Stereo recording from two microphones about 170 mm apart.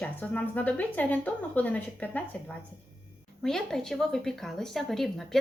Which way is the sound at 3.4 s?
5° left (ahead or behind).